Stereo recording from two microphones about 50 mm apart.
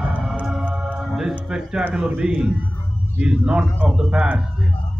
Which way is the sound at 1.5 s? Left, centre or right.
Centre.